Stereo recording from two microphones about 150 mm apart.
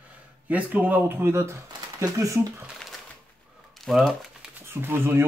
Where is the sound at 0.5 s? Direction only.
10° right (ahead or behind).